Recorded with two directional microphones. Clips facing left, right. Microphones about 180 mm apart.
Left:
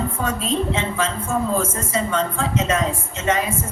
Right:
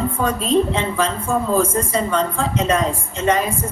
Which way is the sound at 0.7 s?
35° right (ahead or behind).